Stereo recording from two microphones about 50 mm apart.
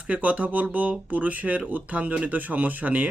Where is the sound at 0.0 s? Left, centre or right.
Right.